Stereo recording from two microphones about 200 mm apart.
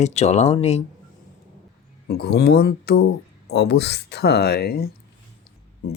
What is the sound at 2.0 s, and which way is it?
Speech, 55° left (ahead or behind).